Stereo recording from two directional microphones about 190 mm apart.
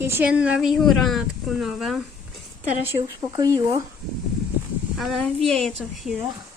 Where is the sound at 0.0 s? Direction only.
10° right (ahead or behind).